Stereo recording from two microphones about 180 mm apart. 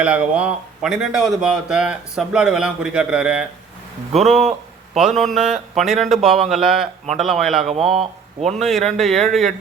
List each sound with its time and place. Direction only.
0.0 s speech: 5° right (ahead or behind)
4.9 s speech: centre (ahead or behind)